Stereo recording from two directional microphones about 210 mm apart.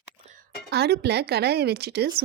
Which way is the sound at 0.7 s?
50° right (ahead or behind).